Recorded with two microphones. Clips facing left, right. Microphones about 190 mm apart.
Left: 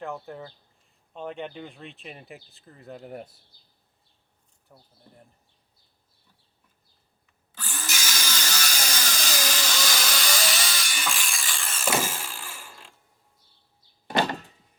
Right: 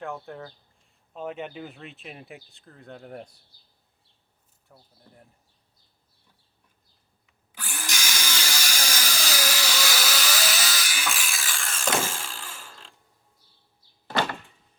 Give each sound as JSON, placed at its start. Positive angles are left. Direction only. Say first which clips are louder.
{"t": 0.0, "sound": "speech", "louder": "even", "side_deg": 0}
{"t": 4.7, "sound": "speech", "louder": "even", "side_deg": 0}
{"t": 7.5, "sound": "drill", "louder": "even", "side_deg": -10}
{"t": 8.0, "sound": "a sound", "louder": "even", "side_deg": -10}
{"t": 14.3, "sound": "door", "louder": "left 3 dB", "side_deg": 40}